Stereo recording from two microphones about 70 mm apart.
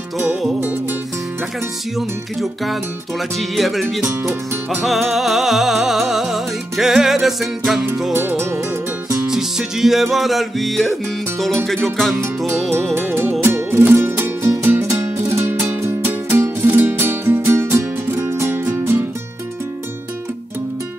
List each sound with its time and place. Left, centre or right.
0.2 s music: centre
2.0 s music: centre
4.1 s music: right
4.8 s music: centre
8.1 s music: right
9.3 s music: centre
12.9 s music: right